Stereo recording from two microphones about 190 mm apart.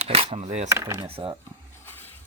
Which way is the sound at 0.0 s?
35° right (ahead or behind).